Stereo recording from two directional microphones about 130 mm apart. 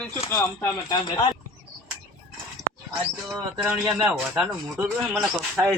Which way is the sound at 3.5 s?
5° right (ahead or behind).